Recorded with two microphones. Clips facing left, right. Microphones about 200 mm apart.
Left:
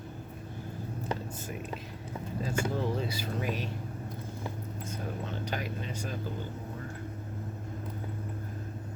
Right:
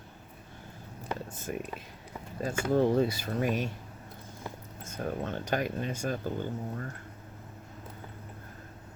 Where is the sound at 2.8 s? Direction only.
50° right (ahead or behind).